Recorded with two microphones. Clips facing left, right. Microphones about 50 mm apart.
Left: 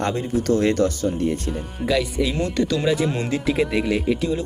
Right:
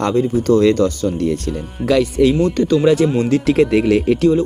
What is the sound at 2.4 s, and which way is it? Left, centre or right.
Speech, right.